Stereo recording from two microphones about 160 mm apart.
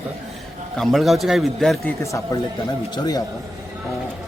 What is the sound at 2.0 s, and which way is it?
Speech, 20° left (ahead or behind).